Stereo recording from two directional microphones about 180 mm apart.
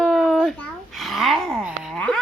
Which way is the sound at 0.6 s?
Centre (ahead or behind).